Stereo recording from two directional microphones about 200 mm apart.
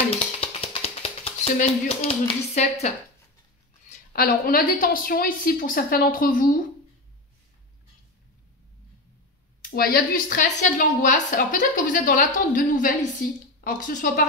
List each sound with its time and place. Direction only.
0.1 s music: 30° left (ahead or behind)
4.1 s a woman's voice: 50° left (ahead or behind)
9.6 s a woman's voice: 50° left (ahead or behind)